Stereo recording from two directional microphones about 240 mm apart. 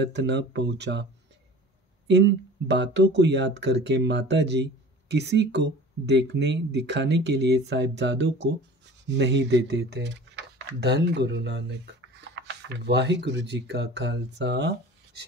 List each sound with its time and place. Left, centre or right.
0.0 s speech: right
2.0 s speech: right